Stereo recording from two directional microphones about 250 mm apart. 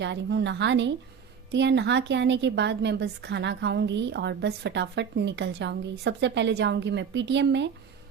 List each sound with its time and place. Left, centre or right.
0.0 s a woman's voice: right